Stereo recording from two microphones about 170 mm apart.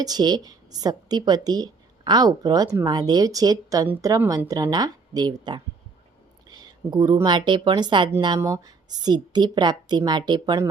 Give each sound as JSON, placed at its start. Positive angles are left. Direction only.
{"t": 0.0, "sound": "speech", "side_deg": -25}